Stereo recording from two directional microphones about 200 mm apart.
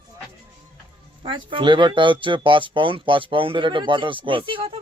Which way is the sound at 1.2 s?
25° right (ahead or behind).